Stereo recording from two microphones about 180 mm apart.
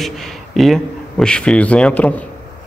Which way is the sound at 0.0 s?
Centre (ahead or behind).